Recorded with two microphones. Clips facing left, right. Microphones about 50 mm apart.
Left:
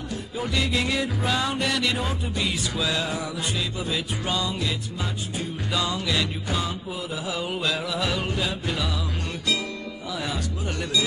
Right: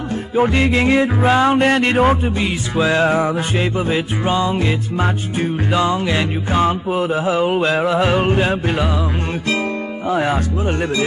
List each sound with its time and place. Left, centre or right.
0.4 s music: right
10.0 s speech: right